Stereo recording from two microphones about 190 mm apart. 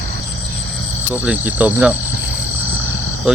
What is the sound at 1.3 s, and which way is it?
Cricket, 5° right (ahead or behind).